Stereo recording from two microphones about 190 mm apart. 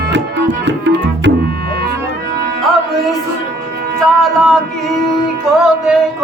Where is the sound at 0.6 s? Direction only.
65° right (ahead or behind).